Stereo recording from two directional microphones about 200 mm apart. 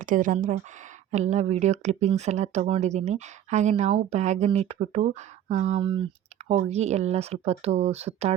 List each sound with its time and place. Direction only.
0.0 s speech: 40° right (ahead or behind)